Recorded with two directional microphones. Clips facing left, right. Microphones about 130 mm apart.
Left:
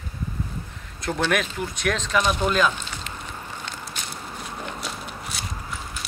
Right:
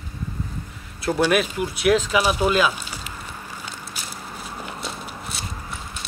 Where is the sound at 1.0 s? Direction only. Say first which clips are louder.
Right 4 dB; 5° right (ahead or behind).